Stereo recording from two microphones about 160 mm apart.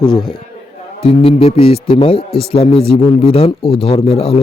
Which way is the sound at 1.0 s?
35° left (ahead or behind).